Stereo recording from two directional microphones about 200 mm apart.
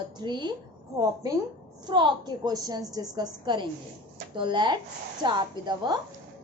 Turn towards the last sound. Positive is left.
turn(degrees=-20)  # may be behind; listen again after turning